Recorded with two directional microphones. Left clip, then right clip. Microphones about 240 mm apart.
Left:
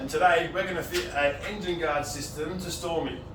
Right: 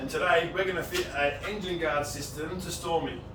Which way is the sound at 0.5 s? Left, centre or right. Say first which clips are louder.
Even; centre.